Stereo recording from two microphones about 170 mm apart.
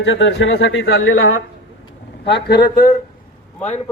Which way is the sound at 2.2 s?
80° left.